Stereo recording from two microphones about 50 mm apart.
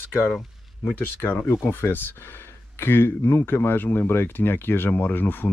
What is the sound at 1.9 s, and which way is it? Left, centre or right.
Speech, left.